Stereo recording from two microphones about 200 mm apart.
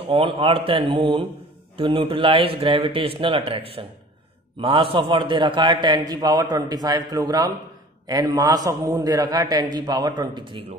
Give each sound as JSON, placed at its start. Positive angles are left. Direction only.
{"t": 0.0, "sound": "a man's voice", "side_deg": -25}